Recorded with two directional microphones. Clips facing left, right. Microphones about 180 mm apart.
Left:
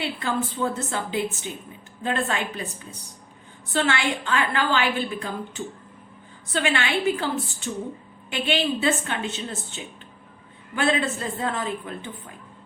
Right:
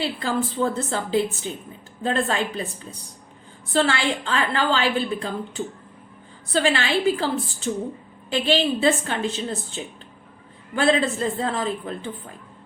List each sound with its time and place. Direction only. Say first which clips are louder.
0.0 s a woman's voice: right 2 dB; 35° right (ahead or behind)
3.7 s a woman's voice: right 2 dB; 35° right (ahead or behind)
8.3 s a woman's voice: right 3 dB; 35° right (ahead or behind)